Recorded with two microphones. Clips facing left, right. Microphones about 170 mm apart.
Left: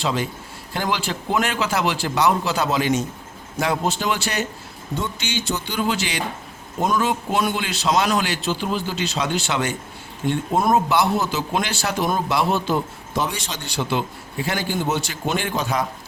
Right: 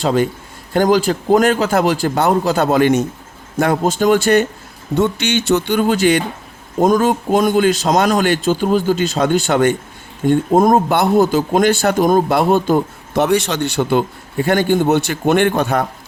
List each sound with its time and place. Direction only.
0.0 s a man's voice: 50° right (ahead or behind)
4.9 s a man's voice: 70° right (ahead or behind)